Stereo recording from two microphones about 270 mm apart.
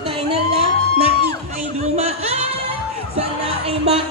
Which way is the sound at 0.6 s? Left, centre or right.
Right.